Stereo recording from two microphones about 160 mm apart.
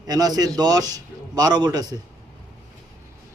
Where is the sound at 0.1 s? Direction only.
25° right (ahead or behind).